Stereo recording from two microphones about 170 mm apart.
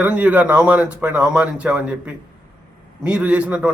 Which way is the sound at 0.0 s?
10° right (ahead or behind).